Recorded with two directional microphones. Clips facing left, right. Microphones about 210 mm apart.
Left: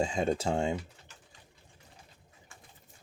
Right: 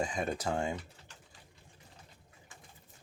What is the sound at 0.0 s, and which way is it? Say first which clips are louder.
Speech: left 5 dB; 25° left (ahead or behind).